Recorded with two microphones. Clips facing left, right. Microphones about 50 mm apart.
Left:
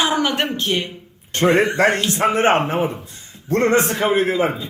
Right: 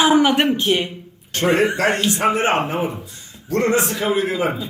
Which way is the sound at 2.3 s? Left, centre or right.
Left.